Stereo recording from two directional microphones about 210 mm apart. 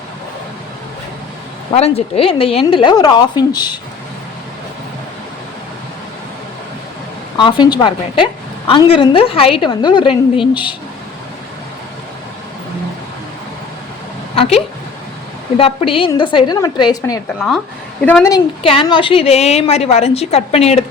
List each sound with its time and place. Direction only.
1.7 s a woman's voice: 30° left (ahead or behind)
7.3 s a woman's voice: 20° left (ahead or behind)
14.3 s a sound: 30° left (ahead or behind)
15.5 s a woman's voice: 25° left (ahead or behind)